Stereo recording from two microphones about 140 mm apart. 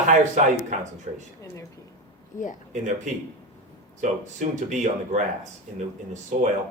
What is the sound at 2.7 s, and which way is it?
Speech, 60° right (ahead or behind).